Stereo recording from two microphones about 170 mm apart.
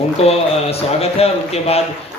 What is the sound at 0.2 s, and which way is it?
A man's voice, 35° left (ahead or behind).